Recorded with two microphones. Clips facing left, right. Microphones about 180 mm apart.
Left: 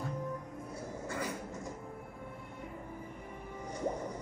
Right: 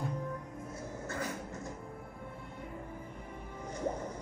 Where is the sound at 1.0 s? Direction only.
10° left (ahead or behind).